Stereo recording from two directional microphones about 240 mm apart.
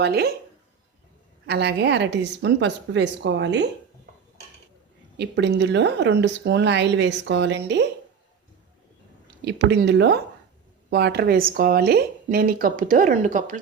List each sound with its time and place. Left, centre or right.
0.0 s speech: right
1.5 s speech: right
5.1 s speech: right
9.2 s speech: right